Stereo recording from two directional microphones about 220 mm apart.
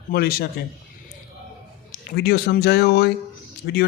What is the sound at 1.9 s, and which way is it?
Speech, 45° left (ahead or behind).